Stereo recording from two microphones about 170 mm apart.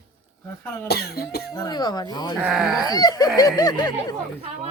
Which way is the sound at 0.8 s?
70° left (ahead or behind).